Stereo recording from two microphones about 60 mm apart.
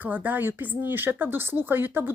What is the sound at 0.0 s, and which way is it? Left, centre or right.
Speech, right.